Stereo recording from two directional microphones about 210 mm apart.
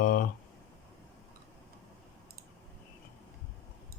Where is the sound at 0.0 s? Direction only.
40° left (ahead or behind).